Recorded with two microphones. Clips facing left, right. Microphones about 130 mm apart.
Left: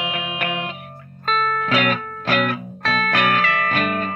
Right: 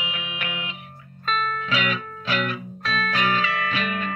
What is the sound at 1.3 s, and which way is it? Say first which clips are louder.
Music: left 5 dB; 55° left (ahead or behind).